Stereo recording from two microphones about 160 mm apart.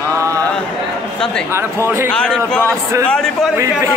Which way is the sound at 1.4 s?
15° right (ahead or behind).